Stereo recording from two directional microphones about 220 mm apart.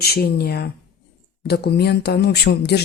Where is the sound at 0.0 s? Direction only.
45° left (ahead or behind).